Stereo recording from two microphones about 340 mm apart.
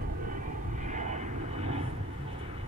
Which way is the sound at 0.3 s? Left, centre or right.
Right.